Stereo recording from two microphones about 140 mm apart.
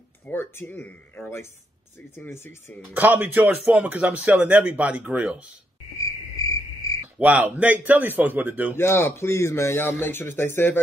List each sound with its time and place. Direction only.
0.3 s speech: 15° left (ahead or behind)
2.9 s a man's voice: 10° right (ahead or behind)
6.0 s cricket: 25° left (ahead or behind)
7.2 s a man's voice: 10° right (ahead or behind)
8.7 s speech: 15° left (ahead or behind)